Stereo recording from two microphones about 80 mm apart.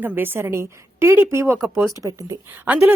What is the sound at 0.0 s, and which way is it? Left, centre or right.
Speech, right.